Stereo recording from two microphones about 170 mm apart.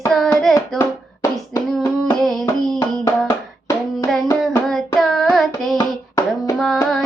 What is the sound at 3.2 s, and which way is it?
Hands, 20° left (ahead or behind).